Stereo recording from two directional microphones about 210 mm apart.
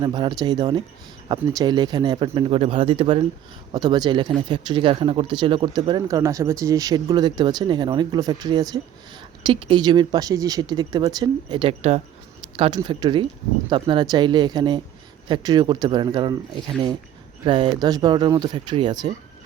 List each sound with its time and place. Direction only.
0.0 s speech: 20° right (ahead or behind)
17.4 s speech: 25° right (ahead or behind)